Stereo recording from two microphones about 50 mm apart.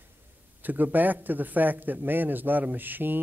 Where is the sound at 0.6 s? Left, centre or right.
Right.